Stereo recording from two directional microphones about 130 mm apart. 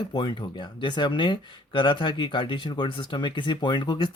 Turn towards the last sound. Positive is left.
turn(degrees=35)  # may be behind; listen again after turning